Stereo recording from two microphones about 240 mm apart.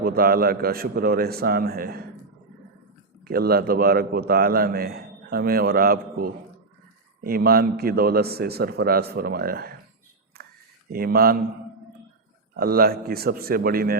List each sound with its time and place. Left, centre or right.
0.0 s a man's voice: right
3.2 s a man's voice: right
10.3 s a sound: right
10.9 s a man's voice: right
12.5 s a man's voice: right